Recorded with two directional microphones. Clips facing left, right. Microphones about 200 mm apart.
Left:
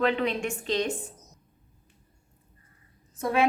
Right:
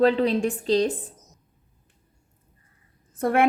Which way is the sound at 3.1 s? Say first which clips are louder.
Right 4 dB; 55° right (ahead or behind).